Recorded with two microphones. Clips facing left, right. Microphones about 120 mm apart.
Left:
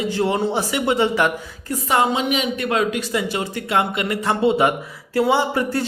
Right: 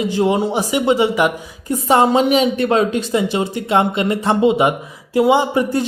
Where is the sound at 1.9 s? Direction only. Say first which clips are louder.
Right 6 dB; 35° right (ahead or behind).